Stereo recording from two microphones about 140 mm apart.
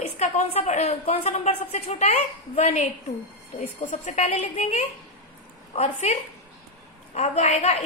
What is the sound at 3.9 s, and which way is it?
Speech, 60° left (ahead or behind).